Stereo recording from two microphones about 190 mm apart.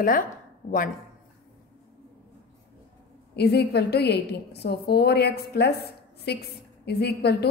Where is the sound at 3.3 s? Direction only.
60° left (ahead or behind).